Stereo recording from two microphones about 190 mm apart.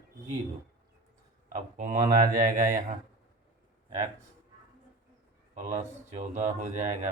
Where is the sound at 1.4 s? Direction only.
40° right (ahead or behind).